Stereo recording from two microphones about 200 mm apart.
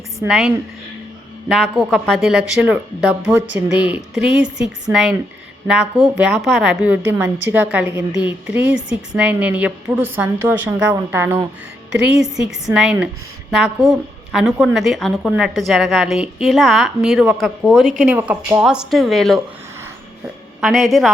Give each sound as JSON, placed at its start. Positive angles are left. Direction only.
{"t": 0.3, "sound": "a woman's voice", "side_deg": 0}
{"t": 4.4, "sound": "a woman's voice", "side_deg": -60}
{"t": 4.6, "sound": "a woman's voice", "side_deg": 0}
{"t": 12.6, "sound": "a woman's voice", "side_deg": 0}
{"t": 20.6, "sound": "a woman's voice", "side_deg": 0}